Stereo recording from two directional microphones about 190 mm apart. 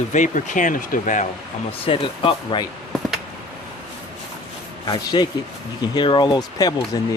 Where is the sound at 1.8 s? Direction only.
30° left (ahead or behind).